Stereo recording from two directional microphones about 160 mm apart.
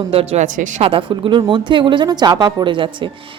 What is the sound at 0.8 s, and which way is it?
Speech, 30° right (ahead or behind).